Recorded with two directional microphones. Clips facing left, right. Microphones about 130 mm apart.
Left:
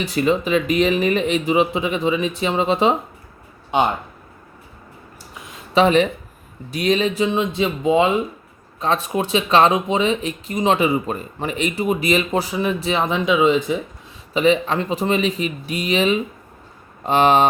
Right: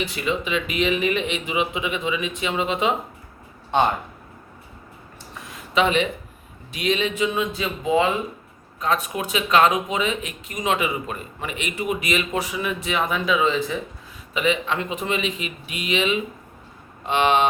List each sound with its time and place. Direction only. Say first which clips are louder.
0.0 s speech: left 6 dB; 40° left (ahead or behind)
5.7 s speech: left 5 dB; 40° left (ahead or behind); by 13.7 s 20° left (ahead or behind)
14.3 s speech: left 6 dB; 35° left (ahead or behind)